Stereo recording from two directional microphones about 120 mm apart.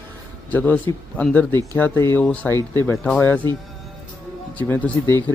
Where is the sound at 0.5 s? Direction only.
15° left (ahead or behind).